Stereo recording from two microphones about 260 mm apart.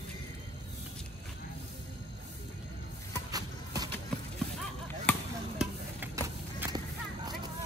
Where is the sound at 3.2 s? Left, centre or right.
Centre.